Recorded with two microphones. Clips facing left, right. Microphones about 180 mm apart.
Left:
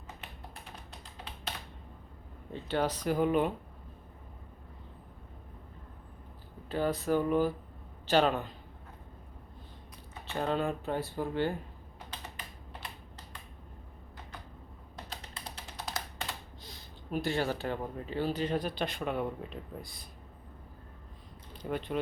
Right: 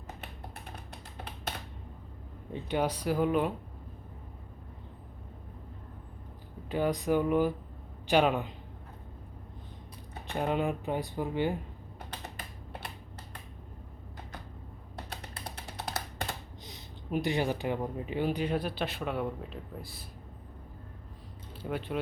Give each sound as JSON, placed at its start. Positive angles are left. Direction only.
{"t": 2.5, "sound": "speech", "side_deg": -15}
{"t": 6.7, "sound": "a man's voice", "side_deg": -15}
{"t": 10.2, "sound": "speech", "side_deg": -15}
{"t": 15.1, "sound": "music", "side_deg": -60}
{"t": 16.6, "sound": "speech", "side_deg": -20}
{"t": 21.6, "sound": "speech", "side_deg": -5}